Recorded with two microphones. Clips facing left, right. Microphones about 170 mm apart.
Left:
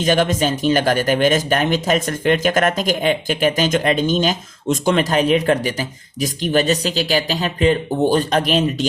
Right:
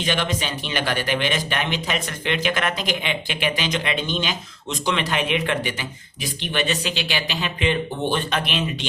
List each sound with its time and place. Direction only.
0.0 s speech: 45° left (ahead or behind)